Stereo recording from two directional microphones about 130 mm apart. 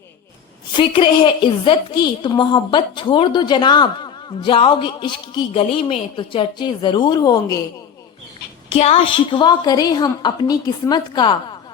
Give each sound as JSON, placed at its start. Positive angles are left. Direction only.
{"t": 0.8, "sound": "a woman's voice", "side_deg": 40}
{"t": 8.7, "sound": "a woman's voice", "side_deg": 55}
{"t": 9.3, "sound": "a woman's voice", "side_deg": 35}